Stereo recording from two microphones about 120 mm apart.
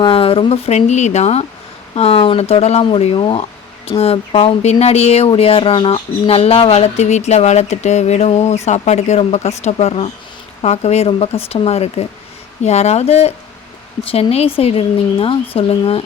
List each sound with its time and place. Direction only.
0.0 s speech: 50° left (ahead or behind)
0.8 s speech: 75° left (ahead or behind)
2.0 s speech: 55° left (ahead or behind)